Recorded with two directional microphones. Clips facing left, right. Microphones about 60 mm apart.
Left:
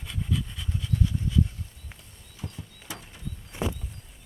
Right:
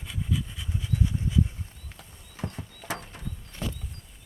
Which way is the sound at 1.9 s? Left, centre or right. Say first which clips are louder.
Right 6 dB; right.